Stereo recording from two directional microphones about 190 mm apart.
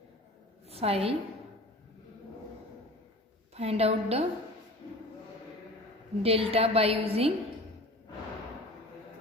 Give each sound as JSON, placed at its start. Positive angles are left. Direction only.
{"t": 0.7, "sound": "a woman's voice", "side_deg": -30}
{"t": 3.5, "sound": "a woman's voice", "side_deg": -30}
{"t": 6.2, "sound": "a woman's voice", "side_deg": -30}